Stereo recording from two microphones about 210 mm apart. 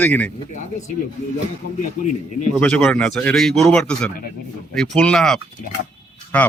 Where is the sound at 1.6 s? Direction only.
45° left (ahead or behind).